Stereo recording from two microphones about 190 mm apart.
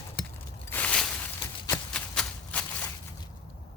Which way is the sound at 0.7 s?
10° left (ahead or behind).